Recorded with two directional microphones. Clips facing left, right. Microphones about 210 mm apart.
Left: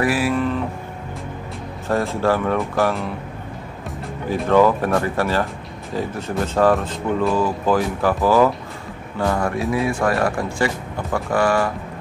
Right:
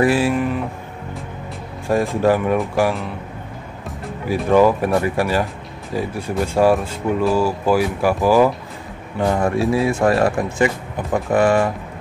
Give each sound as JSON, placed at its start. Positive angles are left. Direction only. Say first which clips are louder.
{"t": 0.0, "sound": "speech", "louder": "right 3 dB", "side_deg": -25}
{"t": 1.9, "sound": "speech", "louder": "right 3 dB", "side_deg": -15}
{"t": 4.3, "sound": "speech", "louder": "right 1 dB", "side_deg": -10}